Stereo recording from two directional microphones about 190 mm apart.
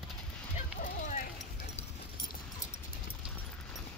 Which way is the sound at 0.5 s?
40° left (ahead or behind).